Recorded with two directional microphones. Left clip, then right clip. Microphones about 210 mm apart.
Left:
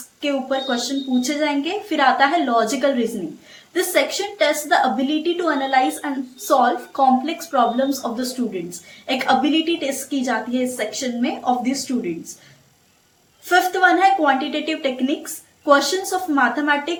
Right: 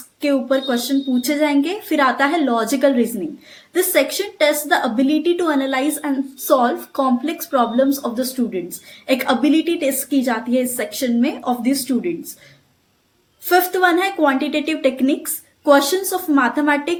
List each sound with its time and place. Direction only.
0.2 s a woman's voice: 45° right (ahead or behind)
13.5 s a woman's voice: 45° right (ahead or behind)